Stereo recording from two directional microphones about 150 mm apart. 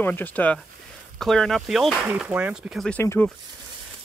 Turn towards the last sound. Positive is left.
turn(degrees=10)  # may be behind; listen again after turning